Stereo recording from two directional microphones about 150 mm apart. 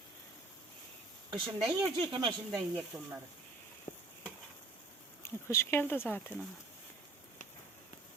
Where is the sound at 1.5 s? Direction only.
25° right (ahead or behind).